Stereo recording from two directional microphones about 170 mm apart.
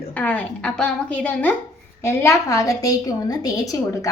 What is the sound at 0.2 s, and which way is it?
A woman's voice, 10° left (ahead or behind).